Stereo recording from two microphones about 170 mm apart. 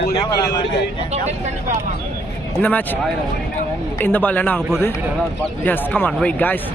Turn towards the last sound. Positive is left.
turn(degrees=10)  # may be behind; listen again after turning